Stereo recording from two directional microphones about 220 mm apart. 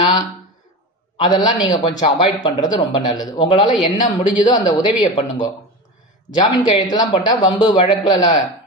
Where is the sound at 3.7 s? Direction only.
35° left (ahead or behind).